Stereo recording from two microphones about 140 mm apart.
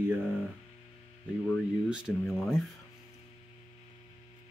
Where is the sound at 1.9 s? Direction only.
5° right (ahead or behind).